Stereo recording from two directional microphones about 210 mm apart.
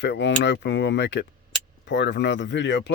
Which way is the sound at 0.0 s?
55° left (ahead or behind).